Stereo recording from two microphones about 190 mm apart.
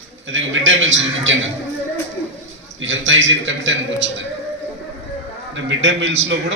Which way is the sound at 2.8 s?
80° right.